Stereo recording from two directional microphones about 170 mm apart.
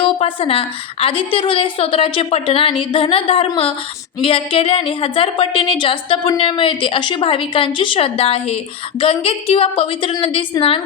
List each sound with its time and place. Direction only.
0.0 s a woman's voice: 30° left (ahead or behind)